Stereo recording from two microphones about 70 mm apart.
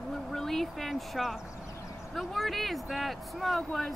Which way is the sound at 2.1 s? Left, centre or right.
Centre.